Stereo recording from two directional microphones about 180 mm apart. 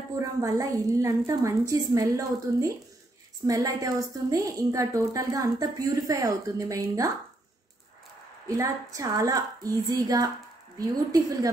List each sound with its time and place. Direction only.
0.2 s a woman's voice: 20° right (ahead or behind)
8.5 s a woman's voice: 20° right (ahead or behind)